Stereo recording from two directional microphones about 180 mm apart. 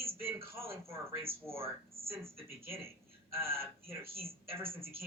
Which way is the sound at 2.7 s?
15° right (ahead or behind).